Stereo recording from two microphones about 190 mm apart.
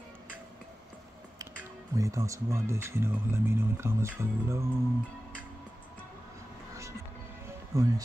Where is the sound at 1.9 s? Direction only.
15° right (ahead or behind).